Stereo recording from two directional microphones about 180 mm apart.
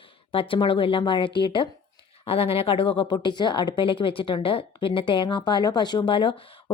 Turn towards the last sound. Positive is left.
turn(degrees=30)  # may be behind; listen again after turning